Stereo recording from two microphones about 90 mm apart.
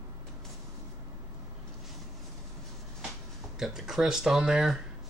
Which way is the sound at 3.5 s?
5° right (ahead or behind).